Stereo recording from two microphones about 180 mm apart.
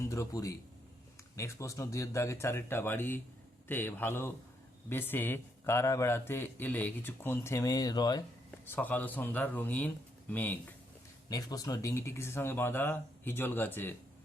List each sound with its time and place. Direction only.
0.0 s a man's voice: 15° left (ahead or behind)
8.4 s a man's voice: 10° left (ahead or behind)